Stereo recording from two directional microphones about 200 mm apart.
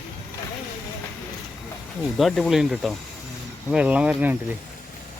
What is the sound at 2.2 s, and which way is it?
Speech, centre (ahead or behind).